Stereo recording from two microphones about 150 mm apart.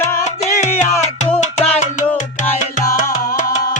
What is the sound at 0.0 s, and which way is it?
Music, 15° left (ahead or behind).